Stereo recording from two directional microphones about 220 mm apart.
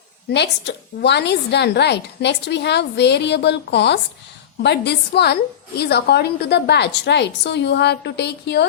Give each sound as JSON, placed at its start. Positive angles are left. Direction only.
{"t": 0.3, "sound": "a woman's voice", "side_deg": 50}